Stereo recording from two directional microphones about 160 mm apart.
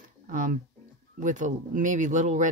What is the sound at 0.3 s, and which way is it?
Speech, 55° right (ahead or behind).